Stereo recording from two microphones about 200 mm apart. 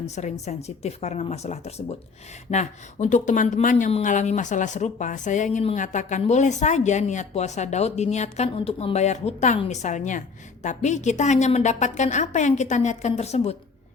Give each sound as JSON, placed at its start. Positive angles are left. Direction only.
{"t": 0.0, "sound": "speech", "side_deg": 35}